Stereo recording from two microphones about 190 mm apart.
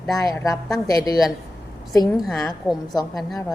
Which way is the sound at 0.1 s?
20° left (ahead or behind).